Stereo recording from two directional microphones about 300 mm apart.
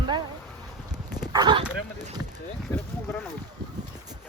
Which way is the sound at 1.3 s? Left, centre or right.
Centre.